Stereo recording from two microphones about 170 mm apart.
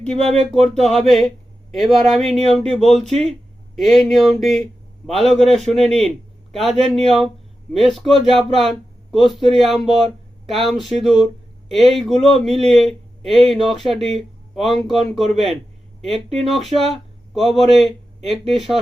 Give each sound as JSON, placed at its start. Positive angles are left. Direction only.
{"t": 0.2, "sound": "speech", "side_deg": -40}
{"t": 0.5, "sound": "speech", "side_deg": 0}
{"t": 16.1, "sound": "speech", "side_deg": -35}
{"t": 16.5, "sound": "speech", "side_deg": 0}